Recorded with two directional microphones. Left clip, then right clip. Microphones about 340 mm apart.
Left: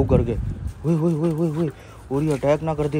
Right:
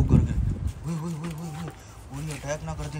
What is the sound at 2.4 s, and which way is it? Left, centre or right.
Speech, left.